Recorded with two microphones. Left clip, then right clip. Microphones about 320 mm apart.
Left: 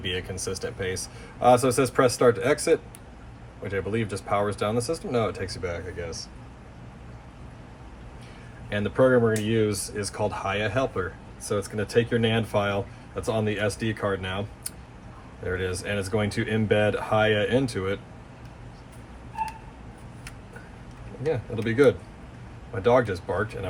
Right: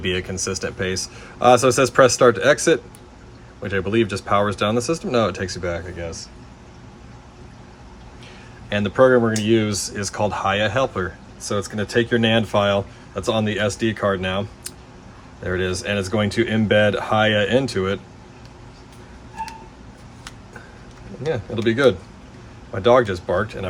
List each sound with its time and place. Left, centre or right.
0.0 s speech: right
8.7 s speech: right
21.2 s speech: right